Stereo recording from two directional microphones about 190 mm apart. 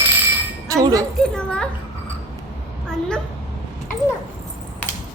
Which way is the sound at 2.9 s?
5° left (ahead or behind).